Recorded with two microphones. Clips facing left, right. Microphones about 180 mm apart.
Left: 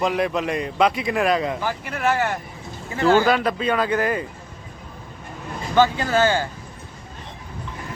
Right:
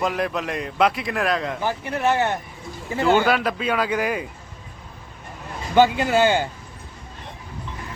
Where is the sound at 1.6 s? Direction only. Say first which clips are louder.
Right 1 dB; 20° right (ahead or behind).